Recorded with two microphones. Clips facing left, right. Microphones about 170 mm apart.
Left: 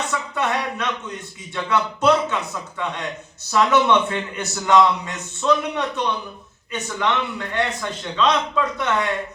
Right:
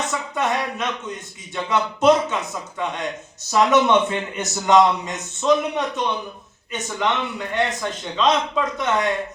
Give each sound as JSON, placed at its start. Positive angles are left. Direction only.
{"t": 0.1, "sound": "a man's voice", "side_deg": -20}